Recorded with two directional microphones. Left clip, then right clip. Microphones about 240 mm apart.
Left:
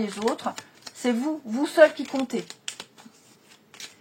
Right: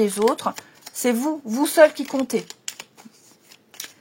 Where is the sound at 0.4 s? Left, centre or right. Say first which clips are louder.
Right 5 dB; right.